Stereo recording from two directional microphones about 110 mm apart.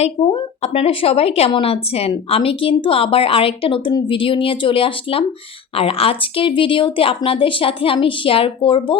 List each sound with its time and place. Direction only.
0.2 s a woman's voice: 60° left (ahead or behind)